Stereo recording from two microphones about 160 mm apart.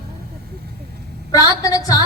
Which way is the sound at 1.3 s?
20° left (ahead or behind).